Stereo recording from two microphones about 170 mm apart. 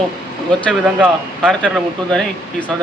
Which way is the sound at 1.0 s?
Centre (ahead or behind).